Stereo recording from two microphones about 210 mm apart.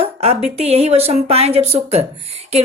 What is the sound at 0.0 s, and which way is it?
Speech, 30° right (ahead or behind).